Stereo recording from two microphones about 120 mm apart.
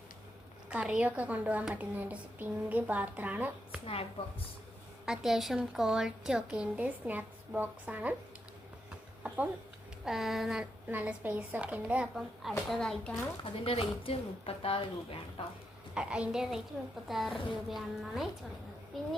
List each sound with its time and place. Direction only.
0.7 s a woman's voice: 10° right (ahead or behind)
4.2 s a woman's voice: 55° left (ahead or behind)
5.0 s a woman's voice: 5° right (ahead or behind)
9.2 s a sound: 10° right (ahead or behind)
10.0 s a woman's voice: 5° right (ahead or behind)
13.7 s a woman's voice: 55° left (ahead or behind)
16.0 s a woman's voice: 10° right (ahead or behind)